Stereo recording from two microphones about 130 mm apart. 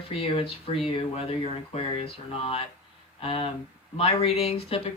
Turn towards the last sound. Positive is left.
turn(degrees=50)  # may be behind; listen again after turning